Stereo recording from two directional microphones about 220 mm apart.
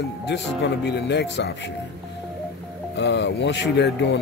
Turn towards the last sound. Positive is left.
turn(degrees=50)  # may be behind; listen again after turning